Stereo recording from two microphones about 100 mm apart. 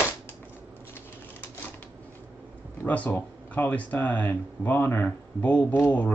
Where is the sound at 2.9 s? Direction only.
20° left (ahead or behind).